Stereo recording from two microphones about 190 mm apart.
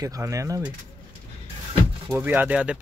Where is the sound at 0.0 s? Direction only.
15° right (ahead or behind).